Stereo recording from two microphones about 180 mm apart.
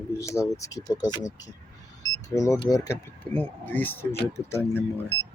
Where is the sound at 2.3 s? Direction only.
20° left (ahead or behind).